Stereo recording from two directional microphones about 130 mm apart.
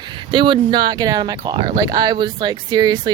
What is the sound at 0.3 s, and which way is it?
Speech, 40° right (ahead or behind).